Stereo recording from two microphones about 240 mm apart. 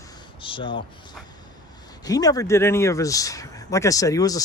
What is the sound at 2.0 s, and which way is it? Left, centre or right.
Speech, centre.